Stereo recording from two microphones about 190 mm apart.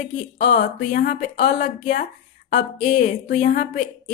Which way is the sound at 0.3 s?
50° left (ahead or behind).